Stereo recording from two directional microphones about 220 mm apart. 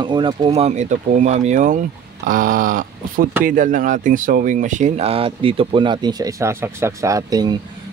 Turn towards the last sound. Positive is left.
turn(degrees=-20)  # may be behind; listen again after turning